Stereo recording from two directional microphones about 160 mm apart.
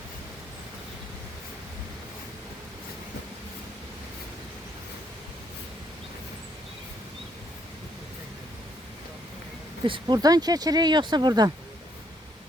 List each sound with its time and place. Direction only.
9.8 s speech: 30° right (ahead or behind)